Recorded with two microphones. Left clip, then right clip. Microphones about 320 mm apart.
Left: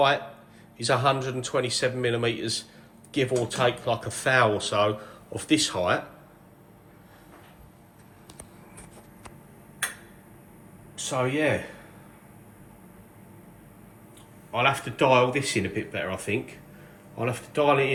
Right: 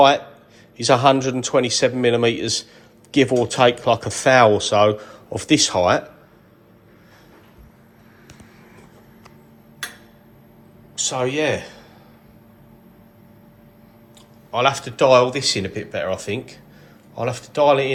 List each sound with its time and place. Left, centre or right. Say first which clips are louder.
0.8 s speech: right 9 dB; right
10.9 s speech: right 5 dB; centre
14.5 s speech: right 5 dB; centre